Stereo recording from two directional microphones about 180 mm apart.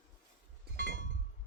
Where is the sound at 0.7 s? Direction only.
65° right (ahead or behind).